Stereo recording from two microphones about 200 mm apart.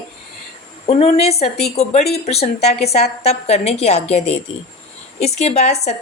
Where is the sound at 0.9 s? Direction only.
30° left (ahead or behind).